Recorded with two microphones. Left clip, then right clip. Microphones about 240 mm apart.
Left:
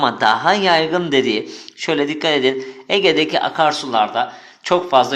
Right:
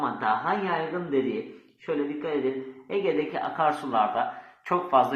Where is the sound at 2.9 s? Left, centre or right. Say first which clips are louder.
Left 12 dB; left.